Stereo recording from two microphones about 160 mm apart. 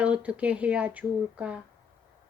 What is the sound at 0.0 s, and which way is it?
Speech, 10° right (ahead or behind).